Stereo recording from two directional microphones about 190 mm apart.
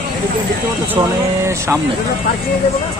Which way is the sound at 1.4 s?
15° right (ahead or behind).